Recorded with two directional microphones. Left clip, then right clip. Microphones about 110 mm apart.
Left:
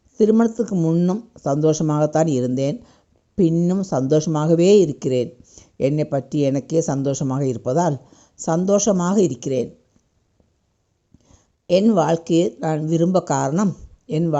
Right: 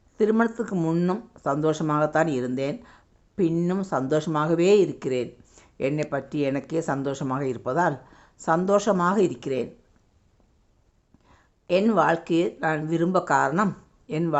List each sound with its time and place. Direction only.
0.2 s speech: 35° left (ahead or behind)
0.7 s speech: 20° left (ahead or behind)
1.5 s speech: 35° left (ahead or behind)
2.6 s a sound: 45° left (ahead or behind)
3.5 s speech: 25° left (ahead or behind)
3.8 s speech: 40° left (ahead or behind)
5.5 s a sound: 40° left (ahead or behind)
6.1 s speech: 40° left (ahead or behind)
11.3 s a sound: 40° left (ahead or behind)
11.9 s speech: 40° left (ahead or behind)
13.5 s speech: 25° left (ahead or behind)
14.1 s speech: 40° left (ahead or behind)